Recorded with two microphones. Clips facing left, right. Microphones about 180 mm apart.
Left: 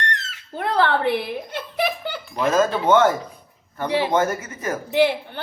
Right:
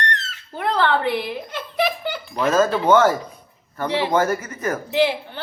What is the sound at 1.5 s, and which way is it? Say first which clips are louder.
Giggle: right 2 dB; 55° left (ahead or behind).